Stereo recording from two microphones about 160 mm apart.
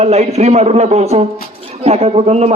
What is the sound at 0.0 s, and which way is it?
A man's voice, 40° right (ahead or behind).